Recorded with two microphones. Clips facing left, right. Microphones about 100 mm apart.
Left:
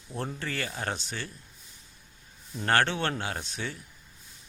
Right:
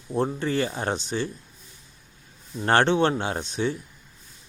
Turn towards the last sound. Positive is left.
turn(degrees=-25)  # may be behind; listen again after turning